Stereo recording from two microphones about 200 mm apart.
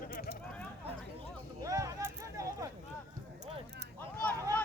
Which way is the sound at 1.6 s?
15° right (ahead or behind).